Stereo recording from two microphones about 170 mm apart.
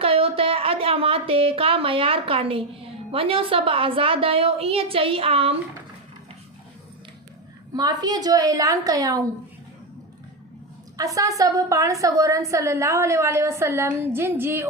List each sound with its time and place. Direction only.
0.0 s a woman's voice: 35° right (ahead or behind)
7.7 s a woman's voice: 25° right (ahead or behind)
10.9 s a woman's voice: 20° right (ahead or behind)